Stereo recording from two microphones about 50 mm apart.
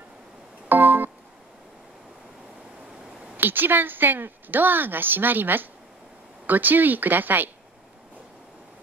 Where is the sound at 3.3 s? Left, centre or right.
Right.